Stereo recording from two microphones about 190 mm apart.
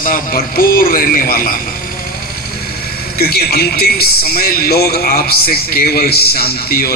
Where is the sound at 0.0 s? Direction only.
50° left (ahead or behind).